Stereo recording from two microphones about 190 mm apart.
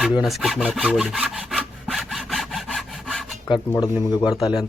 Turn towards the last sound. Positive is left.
turn(degrees=20)  # may be behind; listen again after turning